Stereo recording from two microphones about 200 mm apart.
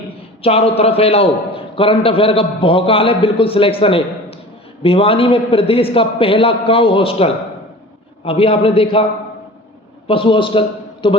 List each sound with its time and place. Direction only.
0.4 s a man's voice: 30° left (ahead or behind)
10.1 s a man's voice: 25° left (ahead or behind)